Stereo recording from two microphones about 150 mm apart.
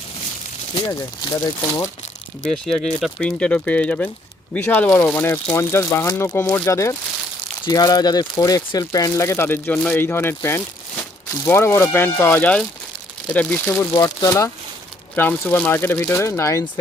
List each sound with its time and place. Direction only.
0.7 s speech: 25° left (ahead or behind)
2.5 s speech: centre (ahead or behind)
13.9 s speech: 25° left (ahead or behind)